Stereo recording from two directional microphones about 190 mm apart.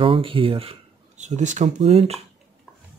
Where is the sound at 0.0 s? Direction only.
30° right (ahead or behind).